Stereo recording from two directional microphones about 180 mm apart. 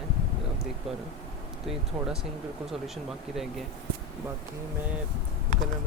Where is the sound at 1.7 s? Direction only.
5° right (ahead or behind).